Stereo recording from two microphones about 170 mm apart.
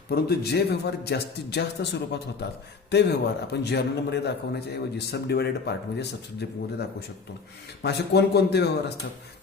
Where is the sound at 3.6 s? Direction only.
80° left.